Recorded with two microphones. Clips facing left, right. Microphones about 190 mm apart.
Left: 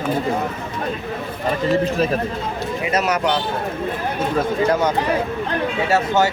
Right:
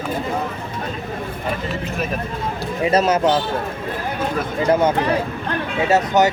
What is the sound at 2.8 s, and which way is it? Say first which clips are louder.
Speech: right 4 dB; 30° right (ahead or behind).